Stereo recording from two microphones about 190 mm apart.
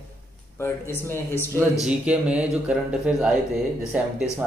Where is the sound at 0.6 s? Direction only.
15° left (ahead or behind).